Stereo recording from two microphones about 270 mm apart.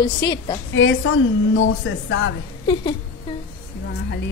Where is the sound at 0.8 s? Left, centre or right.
Left.